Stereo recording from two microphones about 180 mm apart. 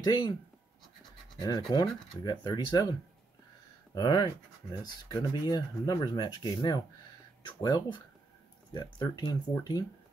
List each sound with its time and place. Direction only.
0.0 s speech: 25° left (ahead or behind)
1.7 s speech: 25° left (ahead or behind)
3.9 s speech: 25° left (ahead or behind)